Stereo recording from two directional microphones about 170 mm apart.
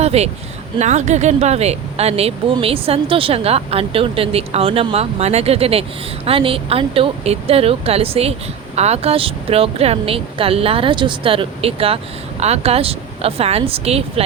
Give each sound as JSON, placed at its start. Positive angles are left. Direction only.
{"t": 0.0, "sound": "speech", "side_deg": -40}